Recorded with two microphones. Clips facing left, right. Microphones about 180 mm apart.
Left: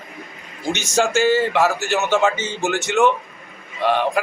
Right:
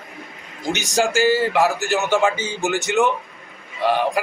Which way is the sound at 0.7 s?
15° right (ahead or behind).